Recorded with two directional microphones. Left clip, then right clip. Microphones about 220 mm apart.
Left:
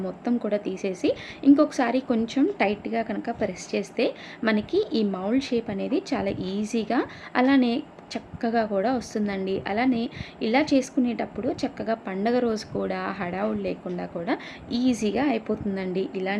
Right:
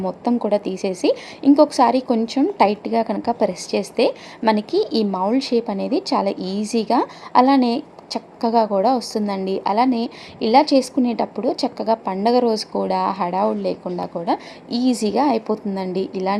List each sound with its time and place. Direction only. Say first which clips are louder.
0.3 s a woman's voice: right 7 dB; 15° right (ahead or behind)